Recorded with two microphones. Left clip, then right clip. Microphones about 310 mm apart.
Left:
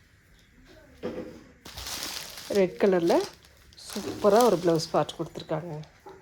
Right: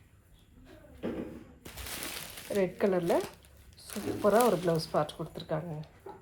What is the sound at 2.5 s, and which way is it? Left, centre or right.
Speech, left.